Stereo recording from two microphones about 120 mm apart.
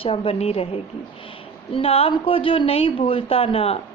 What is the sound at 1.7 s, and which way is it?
A woman's voice, 50° left (ahead or behind).